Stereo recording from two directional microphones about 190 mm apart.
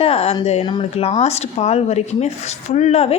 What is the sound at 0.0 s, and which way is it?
A woman's voice, 30° left (ahead or behind).